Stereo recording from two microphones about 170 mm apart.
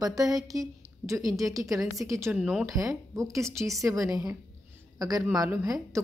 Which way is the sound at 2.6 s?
20° right (ahead or behind).